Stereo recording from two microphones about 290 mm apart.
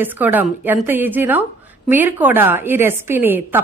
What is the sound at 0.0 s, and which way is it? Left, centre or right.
A woman's voice, centre.